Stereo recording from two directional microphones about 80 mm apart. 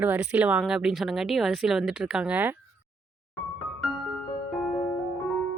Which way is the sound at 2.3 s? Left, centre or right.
Right.